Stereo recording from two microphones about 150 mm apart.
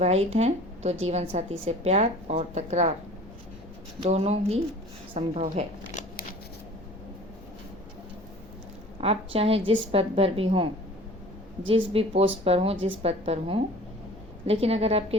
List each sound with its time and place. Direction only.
0.0 s a woman's voice: 45° right (ahead or behind)
4.0 s a woman's voice: 45° right (ahead or behind)
5.9 s shuffling cards: 55° left (ahead or behind)
9.0 s a woman's voice: 40° right (ahead or behind)
11.7 s a woman's voice: 40° right (ahead or behind)